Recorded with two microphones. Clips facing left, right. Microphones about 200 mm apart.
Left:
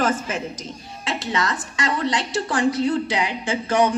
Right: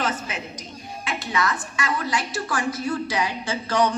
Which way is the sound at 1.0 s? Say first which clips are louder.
Left 1 dB; 30° left (ahead or behind).